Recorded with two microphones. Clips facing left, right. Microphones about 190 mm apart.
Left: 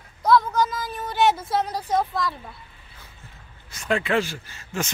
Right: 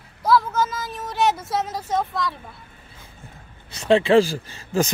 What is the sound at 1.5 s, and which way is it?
Speech, centre (ahead or behind).